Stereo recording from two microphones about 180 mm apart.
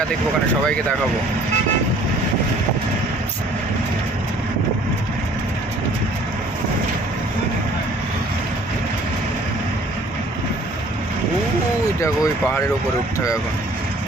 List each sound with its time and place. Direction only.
11.9 s speech: 15° left (ahead or behind)